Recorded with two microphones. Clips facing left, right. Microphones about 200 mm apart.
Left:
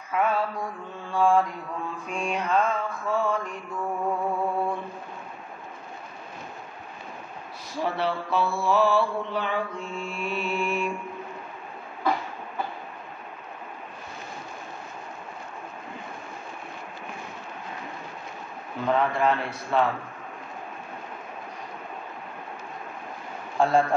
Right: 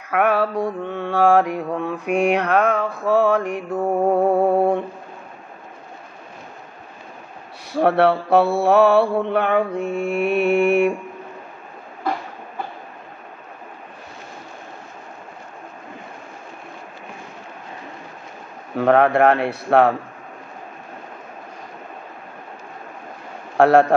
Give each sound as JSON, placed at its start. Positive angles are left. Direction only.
{"t": 0.1, "sound": "mantra", "side_deg": -70}
{"t": 7.7, "sound": "mantra", "side_deg": -65}
{"t": 18.8, "sound": "mantra", "side_deg": -65}
{"t": 23.6, "sound": "mantra", "side_deg": -70}